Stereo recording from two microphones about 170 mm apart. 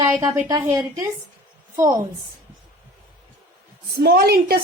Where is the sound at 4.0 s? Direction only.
65° right (ahead or behind).